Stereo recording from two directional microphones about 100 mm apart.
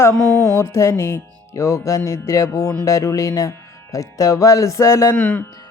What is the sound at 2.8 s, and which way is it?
A man's voice, 30° left (ahead or behind).